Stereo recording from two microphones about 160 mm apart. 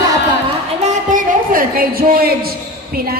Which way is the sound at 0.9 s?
55° right (ahead or behind).